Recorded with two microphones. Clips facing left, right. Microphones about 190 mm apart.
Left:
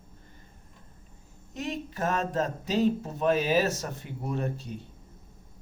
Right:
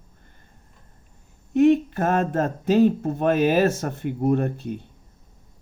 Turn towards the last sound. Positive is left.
turn(degrees=-55)  # may be behind; listen again after turning